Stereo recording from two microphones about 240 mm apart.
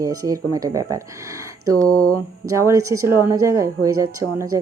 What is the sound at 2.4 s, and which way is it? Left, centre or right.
Speech, centre.